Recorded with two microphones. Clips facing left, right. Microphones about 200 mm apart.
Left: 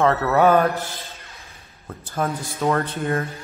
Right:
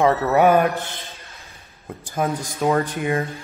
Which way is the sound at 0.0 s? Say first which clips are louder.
Right 1 dB; 15° right (ahead or behind).